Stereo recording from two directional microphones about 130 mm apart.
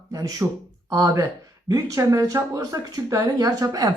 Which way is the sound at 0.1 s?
25° right (ahead or behind).